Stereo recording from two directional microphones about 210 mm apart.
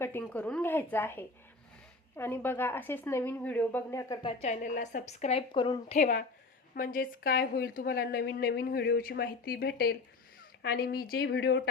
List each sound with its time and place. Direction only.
0.0 s a woman's voice: 10° left (ahead or behind)
6.0 s a woman's voice: 40° left (ahead or behind)